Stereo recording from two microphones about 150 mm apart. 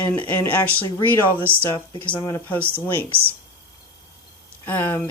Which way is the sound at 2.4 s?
10° left (ahead or behind).